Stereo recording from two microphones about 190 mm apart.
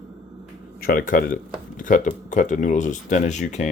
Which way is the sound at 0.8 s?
50° left (ahead or behind).